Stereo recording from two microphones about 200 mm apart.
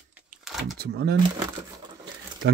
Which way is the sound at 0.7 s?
55° right (ahead or behind).